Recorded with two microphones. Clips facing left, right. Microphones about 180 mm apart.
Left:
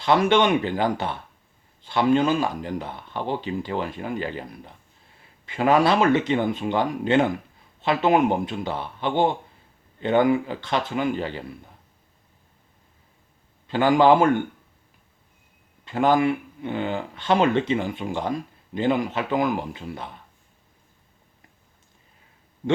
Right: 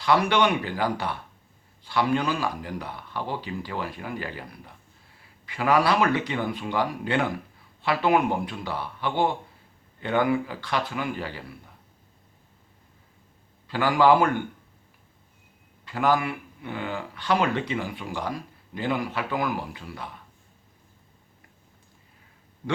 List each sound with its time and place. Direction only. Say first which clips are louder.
0.0 s speech: left 3 dB; 25° left (ahead or behind)
13.7 s speech: left 3 dB; 20° left (ahead or behind)
15.8 s speech: left 4 dB; 25° left (ahead or behind)